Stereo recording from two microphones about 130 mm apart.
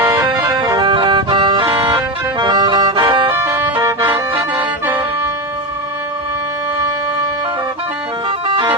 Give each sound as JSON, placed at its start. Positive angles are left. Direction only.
{"t": 0.2, "sound": "music", "side_deg": -30}
{"t": 3.3, "sound": "vehicle", "side_deg": -15}
{"t": 8.4, "sound": "a sound", "side_deg": -40}